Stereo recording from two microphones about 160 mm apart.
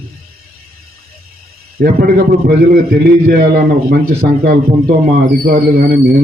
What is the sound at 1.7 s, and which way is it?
A man's voice, 70° right (ahead or behind).